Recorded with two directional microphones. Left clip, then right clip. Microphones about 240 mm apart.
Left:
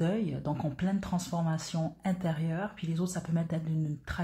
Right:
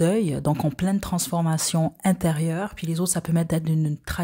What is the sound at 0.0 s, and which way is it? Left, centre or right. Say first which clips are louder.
Speech: right 10 dB; right.